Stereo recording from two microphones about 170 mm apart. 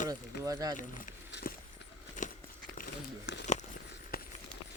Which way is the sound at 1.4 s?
60° left (ahead or behind).